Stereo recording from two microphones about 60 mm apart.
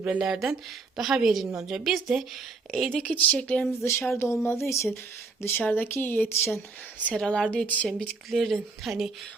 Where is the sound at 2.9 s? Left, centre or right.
Left.